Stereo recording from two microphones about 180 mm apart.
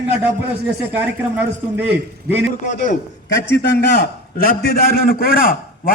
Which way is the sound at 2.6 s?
40° left (ahead or behind).